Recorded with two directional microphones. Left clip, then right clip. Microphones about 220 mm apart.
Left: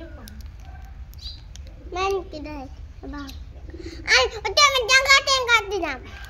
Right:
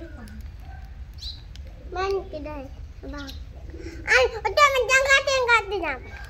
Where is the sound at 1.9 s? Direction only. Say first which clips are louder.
Left 2 dB; 10° left (ahead or behind).